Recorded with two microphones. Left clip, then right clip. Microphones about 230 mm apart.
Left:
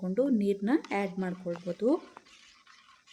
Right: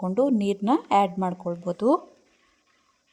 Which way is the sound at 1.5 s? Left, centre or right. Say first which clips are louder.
Right 6 dB; right.